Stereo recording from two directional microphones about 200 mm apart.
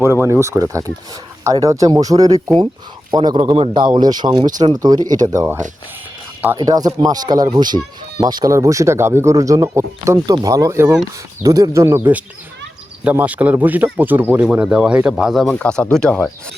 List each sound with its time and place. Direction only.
0.0 s speech: 10° right (ahead or behind)
6.6 s speech: 20° right (ahead or behind); by 16.3 s 5° left (ahead or behind)